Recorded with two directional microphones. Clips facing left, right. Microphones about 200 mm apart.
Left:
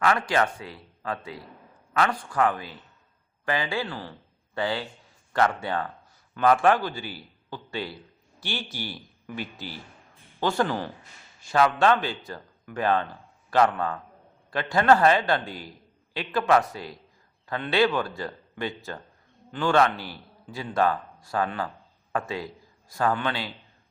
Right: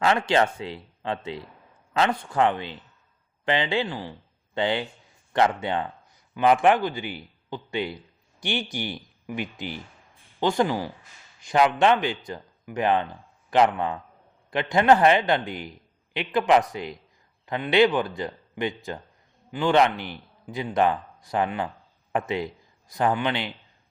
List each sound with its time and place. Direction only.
0.0 s a man's voice: 25° right (ahead or behind)